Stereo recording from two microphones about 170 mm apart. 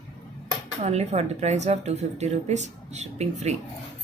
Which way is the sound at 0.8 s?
40° right (ahead or behind).